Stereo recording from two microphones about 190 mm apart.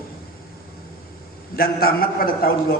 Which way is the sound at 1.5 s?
55° left (ahead or behind).